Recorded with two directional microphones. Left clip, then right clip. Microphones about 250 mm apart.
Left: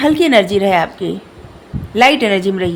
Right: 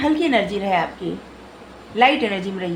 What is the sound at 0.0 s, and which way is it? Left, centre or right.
Speech, left.